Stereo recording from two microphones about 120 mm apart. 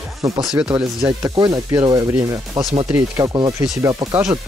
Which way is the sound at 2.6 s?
40° right (ahead or behind).